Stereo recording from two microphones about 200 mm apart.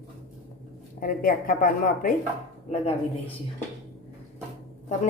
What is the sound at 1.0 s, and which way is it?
A woman's voice, 45° left (ahead or behind).